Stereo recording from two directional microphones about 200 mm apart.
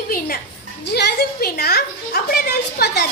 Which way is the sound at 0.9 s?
55° left (ahead or behind).